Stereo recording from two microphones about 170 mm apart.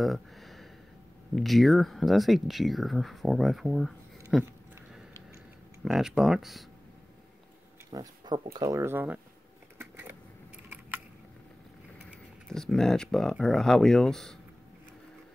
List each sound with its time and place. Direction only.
0.0 s a sound: centre (ahead or behind)
1.3 s speech: centre (ahead or behind)
5.9 s speech: 5° right (ahead or behind)
7.9 s speech: 20° right (ahead or behind)
9.8 s a sound: 15° right (ahead or behind)
12.1 s speech: centre (ahead or behind)